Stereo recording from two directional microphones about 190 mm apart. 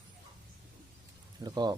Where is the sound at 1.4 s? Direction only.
20° right (ahead or behind).